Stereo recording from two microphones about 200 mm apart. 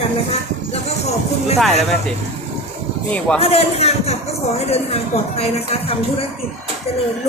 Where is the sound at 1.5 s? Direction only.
Centre (ahead or behind).